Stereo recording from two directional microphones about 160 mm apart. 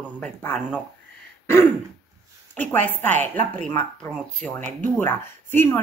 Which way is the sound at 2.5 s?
10° left (ahead or behind).